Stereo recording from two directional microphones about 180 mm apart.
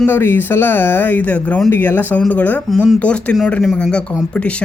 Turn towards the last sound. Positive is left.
turn(degrees=5)  # may be behind; listen again after turning